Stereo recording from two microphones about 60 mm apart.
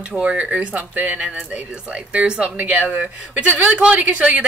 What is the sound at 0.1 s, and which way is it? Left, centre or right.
A woman's voice, right.